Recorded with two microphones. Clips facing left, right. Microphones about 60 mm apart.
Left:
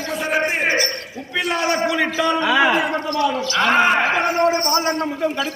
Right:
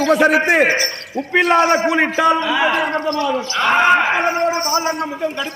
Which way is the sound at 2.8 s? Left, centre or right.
Right.